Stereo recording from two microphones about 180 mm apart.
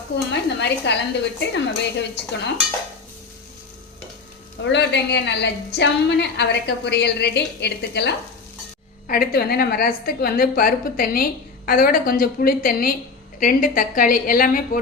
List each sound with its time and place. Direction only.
0.3 s a woman's voice: 70° left (ahead or behind)
4.6 s a woman's voice: 75° left (ahead or behind)
9.0 s a woman's voice: 55° left (ahead or behind)